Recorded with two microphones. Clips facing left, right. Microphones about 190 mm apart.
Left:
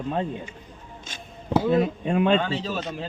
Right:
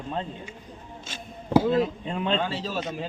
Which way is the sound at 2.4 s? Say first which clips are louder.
Left 2 dB; 5° right (ahead or behind).